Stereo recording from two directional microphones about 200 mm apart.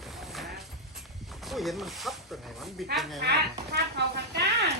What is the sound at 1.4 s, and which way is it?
Speech, centre (ahead or behind).